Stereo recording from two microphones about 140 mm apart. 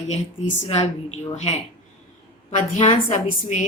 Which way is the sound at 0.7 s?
55° left (ahead or behind).